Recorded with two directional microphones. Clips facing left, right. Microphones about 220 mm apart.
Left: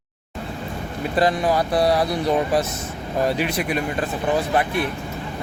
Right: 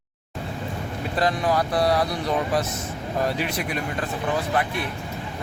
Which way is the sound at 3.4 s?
Centre (ahead or behind).